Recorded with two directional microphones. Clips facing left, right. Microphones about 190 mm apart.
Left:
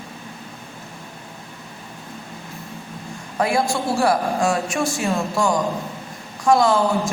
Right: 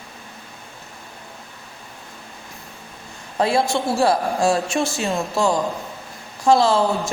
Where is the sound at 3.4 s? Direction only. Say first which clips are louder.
Right 1 dB; 25° right (ahead or behind).